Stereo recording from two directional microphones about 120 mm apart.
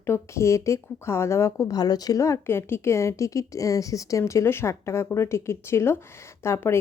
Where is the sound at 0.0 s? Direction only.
20° left (ahead or behind).